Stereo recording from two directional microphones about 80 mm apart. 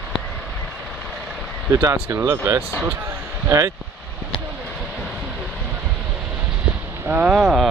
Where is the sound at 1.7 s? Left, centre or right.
Right.